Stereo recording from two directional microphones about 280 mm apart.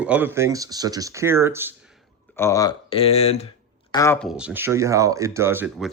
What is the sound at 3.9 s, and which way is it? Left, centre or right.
Speech, centre.